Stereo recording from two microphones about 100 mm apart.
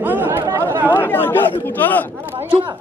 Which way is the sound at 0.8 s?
20° left (ahead or behind).